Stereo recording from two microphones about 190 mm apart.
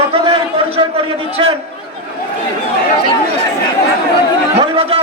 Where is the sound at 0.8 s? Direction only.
25° right (ahead or behind).